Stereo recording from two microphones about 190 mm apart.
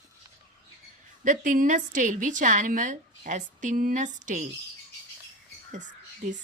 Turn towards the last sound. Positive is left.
turn(degrees=-40)  # may be behind; listen again after turning